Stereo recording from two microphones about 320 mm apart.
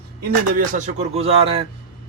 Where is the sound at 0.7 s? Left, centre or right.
Right.